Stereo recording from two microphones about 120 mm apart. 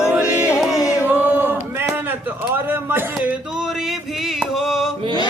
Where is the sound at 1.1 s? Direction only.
15° right (ahead or behind).